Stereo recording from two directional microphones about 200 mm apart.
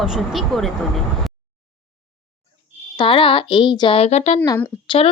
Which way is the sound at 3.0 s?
25° left (ahead or behind).